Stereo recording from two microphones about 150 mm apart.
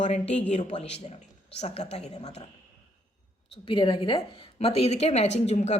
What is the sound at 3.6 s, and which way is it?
A woman's voice, 35° left (ahead or behind).